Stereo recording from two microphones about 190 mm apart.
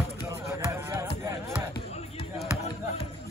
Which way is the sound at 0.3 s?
15° right (ahead or behind).